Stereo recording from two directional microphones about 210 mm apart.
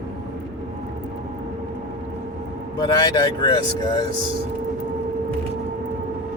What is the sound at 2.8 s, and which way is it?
Speech, 20° left (ahead or behind).